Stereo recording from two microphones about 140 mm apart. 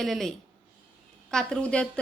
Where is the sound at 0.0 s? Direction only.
Centre (ahead or behind).